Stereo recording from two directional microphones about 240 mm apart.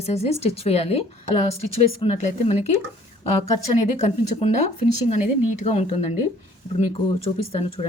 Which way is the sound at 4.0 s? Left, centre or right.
Left.